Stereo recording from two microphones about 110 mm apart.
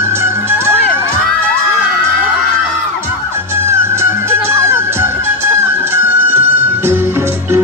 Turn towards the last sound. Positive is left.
turn(degrees=-20)  # may be behind; listen again after turning